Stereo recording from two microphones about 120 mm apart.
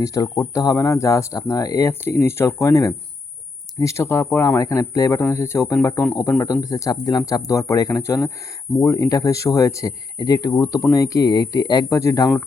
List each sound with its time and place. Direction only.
0.0 s speech: 30° left (ahead or behind)